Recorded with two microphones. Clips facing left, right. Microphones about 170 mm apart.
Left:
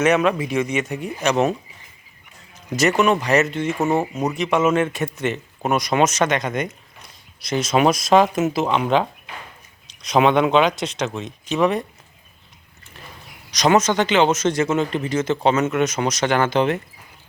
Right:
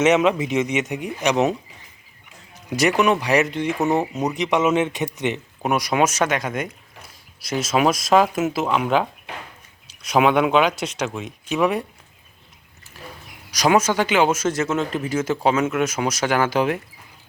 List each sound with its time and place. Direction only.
0.0 s speech: 20° right (ahead or behind)
2.7 s speech: 15° right (ahead or behind)
4.0 s speech: centre (ahead or behind)
4.4 s speech: 15° right (ahead or behind)
13.5 s speech: 10° right (ahead or behind)